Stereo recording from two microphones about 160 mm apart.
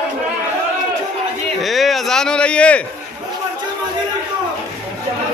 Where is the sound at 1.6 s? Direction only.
Centre (ahead or behind).